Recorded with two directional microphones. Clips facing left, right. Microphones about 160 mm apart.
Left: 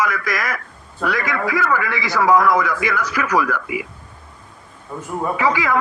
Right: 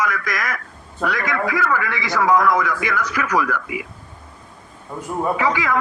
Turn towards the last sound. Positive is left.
turn(degrees=5)  # may be behind; listen again after turning